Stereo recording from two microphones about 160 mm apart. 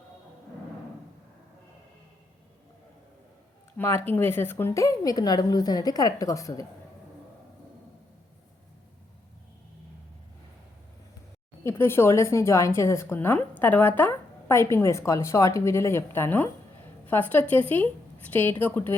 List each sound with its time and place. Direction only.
3.8 s speech: 15° left (ahead or behind)
11.6 s speech: 15° left (ahead or behind)